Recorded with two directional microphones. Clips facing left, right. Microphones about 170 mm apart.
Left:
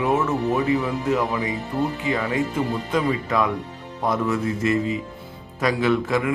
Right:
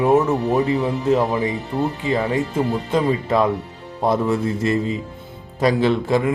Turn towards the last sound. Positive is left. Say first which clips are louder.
# right 3 dB
turn(degrees=-30)  # may be behind; listen again after turning